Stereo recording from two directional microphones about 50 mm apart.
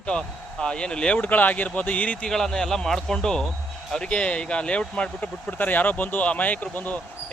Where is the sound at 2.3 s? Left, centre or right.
Centre.